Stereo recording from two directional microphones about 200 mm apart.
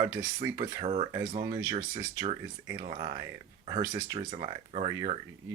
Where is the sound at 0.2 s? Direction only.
20° right (ahead or behind).